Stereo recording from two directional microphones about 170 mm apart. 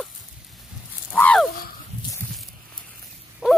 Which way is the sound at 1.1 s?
10° left (ahead or behind).